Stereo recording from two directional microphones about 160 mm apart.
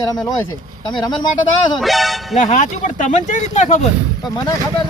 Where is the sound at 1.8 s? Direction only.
Centre (ahead or behind).